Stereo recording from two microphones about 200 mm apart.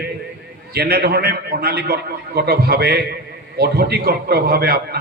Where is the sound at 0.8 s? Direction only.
50° right (ahead or behind).